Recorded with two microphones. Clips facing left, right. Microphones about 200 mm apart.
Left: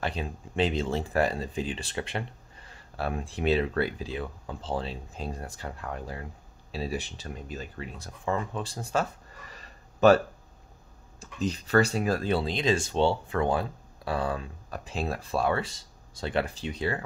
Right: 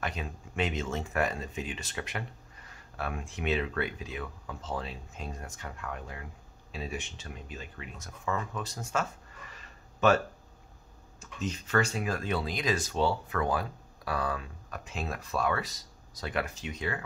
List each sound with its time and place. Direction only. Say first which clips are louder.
0.0 s speech: left 4 dB; 30° left (ahead or behind)
9.5 s a sound: left 3 dB; 35° left (ahead or behind)
11.1 s speech: left 5 dB; 35° left (ahead or behind)